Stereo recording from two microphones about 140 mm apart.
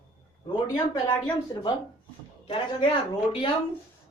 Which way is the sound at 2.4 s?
40° left (ahead or behind).